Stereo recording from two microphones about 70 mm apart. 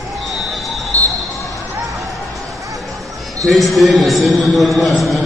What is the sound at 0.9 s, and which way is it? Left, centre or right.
Basketball bounce, left.